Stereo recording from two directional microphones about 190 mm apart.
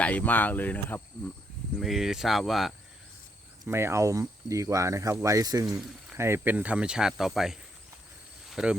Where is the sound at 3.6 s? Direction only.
15° right (ahead or behind).